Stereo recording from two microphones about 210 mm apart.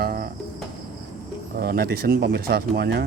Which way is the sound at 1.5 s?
45° right (ahead or behind).